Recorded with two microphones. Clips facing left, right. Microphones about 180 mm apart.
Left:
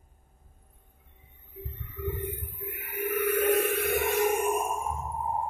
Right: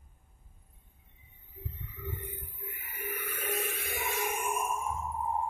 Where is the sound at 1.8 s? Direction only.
65° left (ahead or behind); by 4.9 s 40° left (ahead or behind).